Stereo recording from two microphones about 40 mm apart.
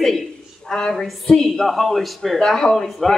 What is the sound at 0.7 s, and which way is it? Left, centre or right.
Speech, centre.